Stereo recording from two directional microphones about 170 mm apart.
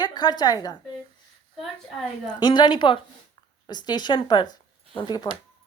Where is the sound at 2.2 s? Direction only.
25° left (ahead or behind).